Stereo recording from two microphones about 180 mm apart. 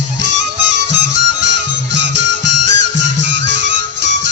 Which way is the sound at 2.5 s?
80° right.